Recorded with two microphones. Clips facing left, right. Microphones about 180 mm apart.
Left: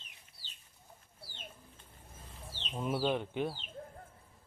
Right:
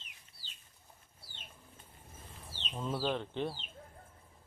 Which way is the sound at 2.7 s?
15° left (ahead or behind).